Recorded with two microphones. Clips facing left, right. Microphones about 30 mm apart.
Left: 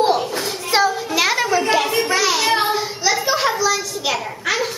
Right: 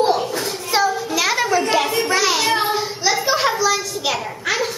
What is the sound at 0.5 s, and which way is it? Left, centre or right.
Child singing, left.